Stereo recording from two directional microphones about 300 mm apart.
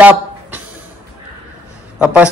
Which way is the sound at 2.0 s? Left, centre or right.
Centre.